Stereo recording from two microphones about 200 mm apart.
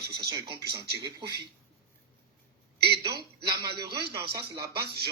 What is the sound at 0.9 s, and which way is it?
Speech, 55° right (ahead or behind).